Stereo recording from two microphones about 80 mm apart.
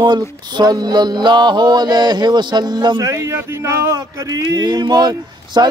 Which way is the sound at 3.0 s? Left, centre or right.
Right.